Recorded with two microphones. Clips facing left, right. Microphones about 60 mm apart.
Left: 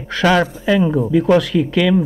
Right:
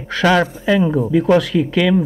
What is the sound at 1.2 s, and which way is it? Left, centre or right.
Speech, right.